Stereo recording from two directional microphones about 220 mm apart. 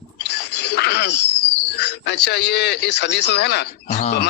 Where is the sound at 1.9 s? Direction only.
50° left (ahead or behind).